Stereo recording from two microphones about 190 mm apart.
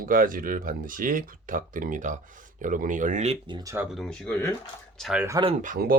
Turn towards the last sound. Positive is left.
turn(degrees=-45)  # may be behind; listen again after turning